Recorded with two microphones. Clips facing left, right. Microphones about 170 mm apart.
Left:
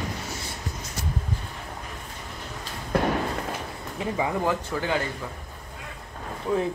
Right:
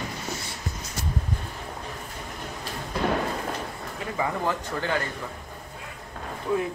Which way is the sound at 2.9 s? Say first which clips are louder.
Left 4 dB; 60° left (ahead or behind).